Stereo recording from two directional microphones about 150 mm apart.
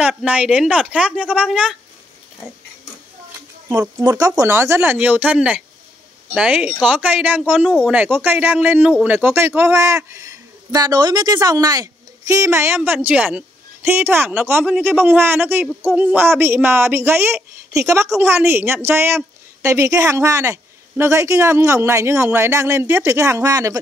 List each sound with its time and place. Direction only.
0.0 s speech: 5° right (ahead or behind)
4.4 s a woman's voice: 15° right (ahead or behind)